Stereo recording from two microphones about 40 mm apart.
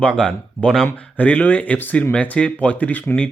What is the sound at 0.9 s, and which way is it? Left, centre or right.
Speech, left.